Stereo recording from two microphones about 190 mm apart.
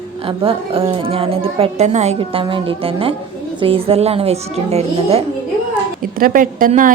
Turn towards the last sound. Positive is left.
turn(degrees=-45)  # may be behind; listen again after turning